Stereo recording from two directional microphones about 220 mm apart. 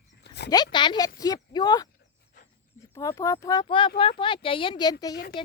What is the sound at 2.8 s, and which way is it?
Speech, 15° left (ahead or behind).